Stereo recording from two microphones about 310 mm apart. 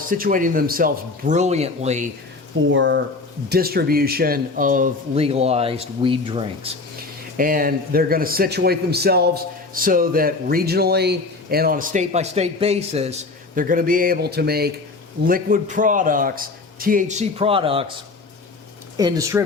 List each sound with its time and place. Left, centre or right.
0.1 s a man's voice: right
2.6 s a man's voice: right; by 17.8 s centre
18.9 s speech: centre